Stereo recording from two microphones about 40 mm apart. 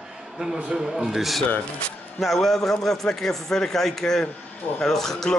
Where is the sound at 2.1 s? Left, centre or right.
Centre.